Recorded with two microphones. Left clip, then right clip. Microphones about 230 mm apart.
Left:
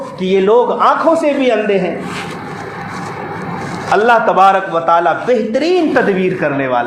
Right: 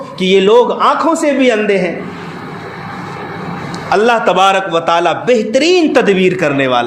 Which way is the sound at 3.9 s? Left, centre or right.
Right.